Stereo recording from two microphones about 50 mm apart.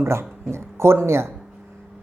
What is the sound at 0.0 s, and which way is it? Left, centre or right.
A woman's voice, right.